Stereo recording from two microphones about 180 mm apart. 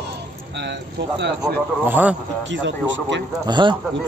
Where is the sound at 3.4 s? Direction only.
25° right (ahead or behind).